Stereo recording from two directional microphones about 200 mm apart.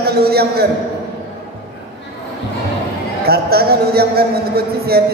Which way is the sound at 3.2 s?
50° right (ahead or behind).